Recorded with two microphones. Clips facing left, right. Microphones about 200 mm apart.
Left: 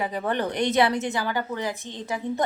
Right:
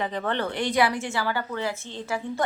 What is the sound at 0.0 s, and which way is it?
A woman's voice, 10° left (ahead or behind).